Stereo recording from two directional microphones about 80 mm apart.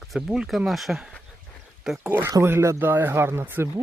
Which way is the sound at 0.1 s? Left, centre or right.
Centre.